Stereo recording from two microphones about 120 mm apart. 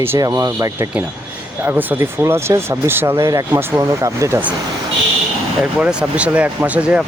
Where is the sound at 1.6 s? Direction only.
15° right (ahead or behind).